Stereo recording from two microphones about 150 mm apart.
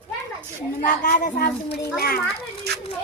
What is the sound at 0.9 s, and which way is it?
A child's voice, 65° left (ahead or behind).